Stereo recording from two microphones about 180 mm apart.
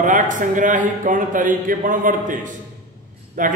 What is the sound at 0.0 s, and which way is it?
A man's voice, 45° right (ahead or behind).